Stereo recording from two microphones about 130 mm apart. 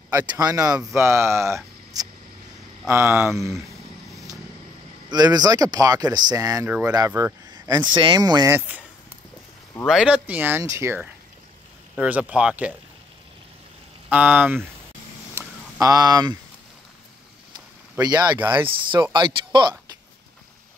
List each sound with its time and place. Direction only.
0.3 s speech: 30° right (ahead or behind)
5.1 s speech: 30° right (ahead or behind)
7.1 s speech: 15° right (ahead or behind)
7.5 s speech: 30° right (ahead or behind)
8.5 s speech: 10° right (ahead or behind)
9.8 s speech: 5° right (ahead or behind); by 11.0 s 25° right (ahead or behind)
11.9 s speech: 10° right (ahead or behind)
14.1 s speech: 10° right (ahead or behind)
15.3 s a sound: 25° right (ahead or behind)
18.0 s speech: 30° right (ahead or behind)
18.4 s speech: 15° right (ahead or behind)
19.1 s speech: 35° right (ahead or behind)